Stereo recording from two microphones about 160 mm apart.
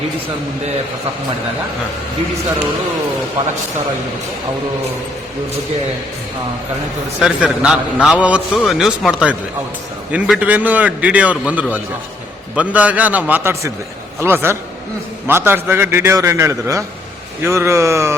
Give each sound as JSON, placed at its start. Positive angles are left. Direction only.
{"t": 7.2, "sound": "a man's voice", "side_deg": -5}